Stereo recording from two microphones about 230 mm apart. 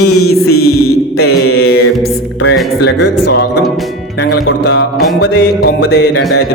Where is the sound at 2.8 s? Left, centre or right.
Left.